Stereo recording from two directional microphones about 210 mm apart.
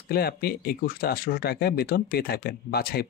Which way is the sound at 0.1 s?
45° left (ahead or behind).